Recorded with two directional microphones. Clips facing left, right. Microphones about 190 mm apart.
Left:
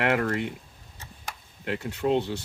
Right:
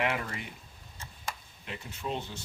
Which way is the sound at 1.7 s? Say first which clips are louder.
Left 11 dB; 70° left (ahead or behind).